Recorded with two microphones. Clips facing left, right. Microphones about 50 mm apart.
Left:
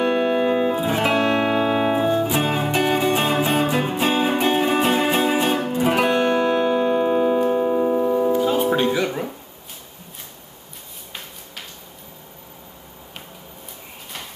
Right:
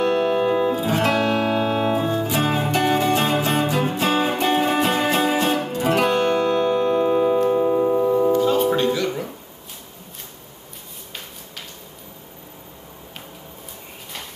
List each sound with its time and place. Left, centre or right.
0.0 s music: centre